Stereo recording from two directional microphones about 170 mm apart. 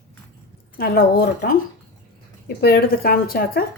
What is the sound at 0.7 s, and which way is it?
Speech, 60° left (ahead or behind).